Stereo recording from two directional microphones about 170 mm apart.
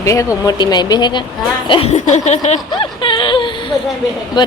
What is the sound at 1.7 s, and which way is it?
Chuckle, 35° left (ahead or behind).